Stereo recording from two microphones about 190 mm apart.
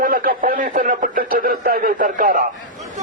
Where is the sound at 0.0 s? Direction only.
45° right (ahead or behind).